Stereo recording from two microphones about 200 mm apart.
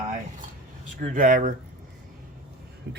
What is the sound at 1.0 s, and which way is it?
Speech, 40° right (ahead or behind).